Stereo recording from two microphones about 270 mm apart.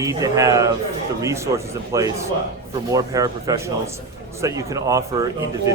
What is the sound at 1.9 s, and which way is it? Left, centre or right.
Speech, centre.